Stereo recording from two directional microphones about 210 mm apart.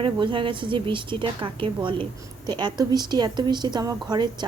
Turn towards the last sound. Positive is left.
turn(degrees=-20)  # may be behind; listen again after turning